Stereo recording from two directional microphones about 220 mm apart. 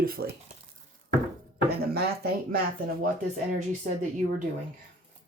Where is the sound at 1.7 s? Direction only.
45° right (ahead or behind).